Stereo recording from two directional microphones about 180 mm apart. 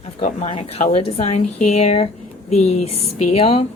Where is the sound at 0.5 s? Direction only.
30° left (ahead or behind).